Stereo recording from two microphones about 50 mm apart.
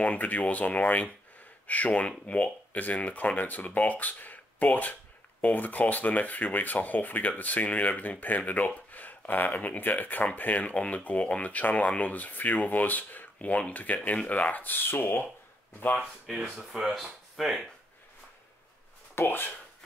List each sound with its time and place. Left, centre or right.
0.0 s speech: left
16.3 s speech: centre
19.1 s speech: left